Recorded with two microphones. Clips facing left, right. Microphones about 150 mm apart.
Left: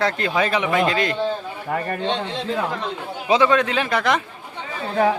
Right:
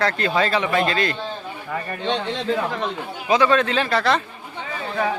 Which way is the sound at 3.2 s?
25° left (ahead or behind).